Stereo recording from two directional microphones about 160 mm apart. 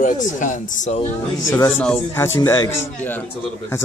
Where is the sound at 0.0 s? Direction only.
50° left (ahead or behind).